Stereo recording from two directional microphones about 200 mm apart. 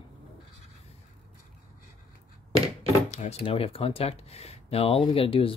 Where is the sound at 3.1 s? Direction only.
30° left (ahead or behind).